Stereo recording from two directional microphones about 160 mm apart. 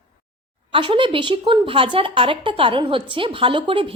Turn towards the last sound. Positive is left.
turn(degrees=-30)  # may be behind; listen again after turning